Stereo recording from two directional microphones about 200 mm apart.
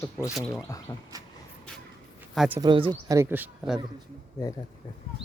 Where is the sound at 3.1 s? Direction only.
10° right (ahead or behind).